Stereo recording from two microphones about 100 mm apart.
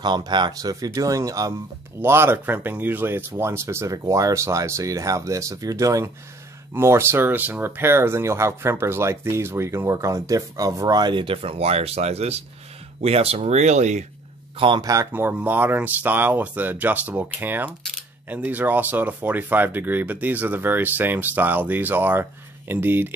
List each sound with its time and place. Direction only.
0.0 s speech: 45° right (ahead or behind)
2.0 s speech: 25° right (ahead or behind); by 13.6 s 90° right
14.8 s speech: 35° right (ahead or behind)
15.1 s speech: 20° right (ahead or behind)